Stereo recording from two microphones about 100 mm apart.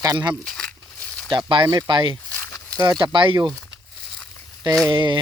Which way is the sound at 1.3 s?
50° right (ahead or behind).